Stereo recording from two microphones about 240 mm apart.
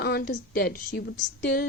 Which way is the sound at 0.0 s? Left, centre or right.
Left.